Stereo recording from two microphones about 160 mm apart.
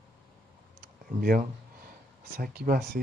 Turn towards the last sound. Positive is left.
turn(degrees=-65)  # may be behind; listen again after turning